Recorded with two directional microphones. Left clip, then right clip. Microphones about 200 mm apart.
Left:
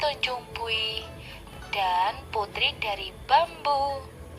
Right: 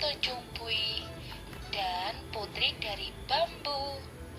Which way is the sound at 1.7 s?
40° left (ahead or behind).